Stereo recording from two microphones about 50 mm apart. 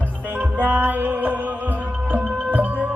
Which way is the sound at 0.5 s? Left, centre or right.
Right.